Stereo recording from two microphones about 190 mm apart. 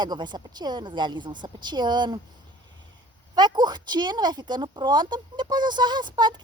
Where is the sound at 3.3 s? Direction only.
20° right (ahead or behind).